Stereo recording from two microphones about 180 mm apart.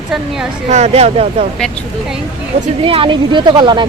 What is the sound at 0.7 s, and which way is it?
Speech, 35° right (ahead or behind).